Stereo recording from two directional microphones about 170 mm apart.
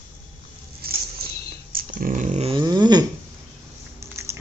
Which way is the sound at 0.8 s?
60° right (ahead or behind).